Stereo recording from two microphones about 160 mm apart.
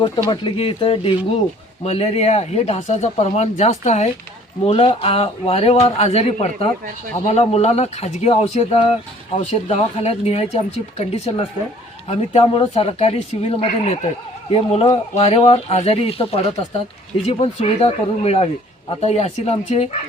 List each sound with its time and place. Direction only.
0.3 s speech: 30° left (ahead or behind)